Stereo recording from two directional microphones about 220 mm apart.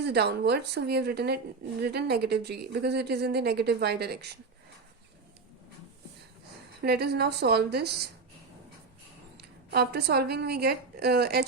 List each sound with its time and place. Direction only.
0.0 s speech: 50° right (ahead or behind)
6.8 s speech: 45° right (ahead or behind)
9.4 s a woman's voice: 45° right (ahead or behind)